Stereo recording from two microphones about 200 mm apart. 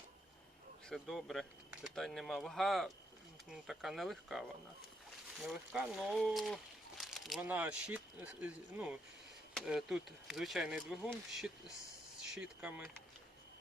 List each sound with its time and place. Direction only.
0.9 s speech: centre (ahead or behind)